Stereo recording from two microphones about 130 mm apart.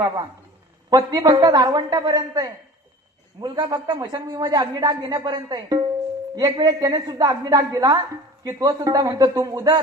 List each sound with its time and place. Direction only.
0.9 s a woman's voice: 30° right (ahead or behind)